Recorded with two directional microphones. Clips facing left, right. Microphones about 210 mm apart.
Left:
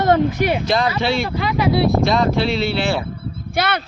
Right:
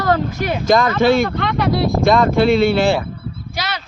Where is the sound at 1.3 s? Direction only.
5° left (ahead or behind).